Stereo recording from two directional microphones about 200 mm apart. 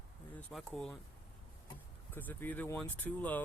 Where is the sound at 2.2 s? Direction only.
10° left (ahead or behind).